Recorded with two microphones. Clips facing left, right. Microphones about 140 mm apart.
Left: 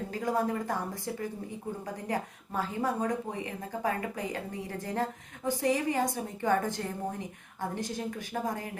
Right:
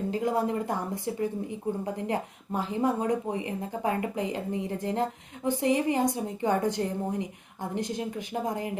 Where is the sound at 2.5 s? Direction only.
20° right (ahead or behind).